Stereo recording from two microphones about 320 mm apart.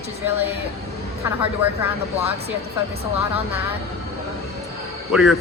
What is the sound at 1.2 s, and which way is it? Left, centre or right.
Speech, centre.